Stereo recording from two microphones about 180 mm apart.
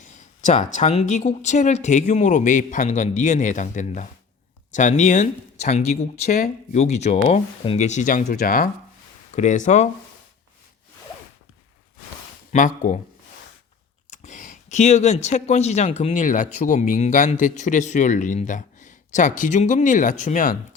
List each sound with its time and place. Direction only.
0.0 s speech: 40° left (ahead or behind)
9.3 s speech: 40° left (ahead or behind)
12.5 s speech: 45° left (ahead or behind)
14.1 s speech: 40° left (ahead or behind)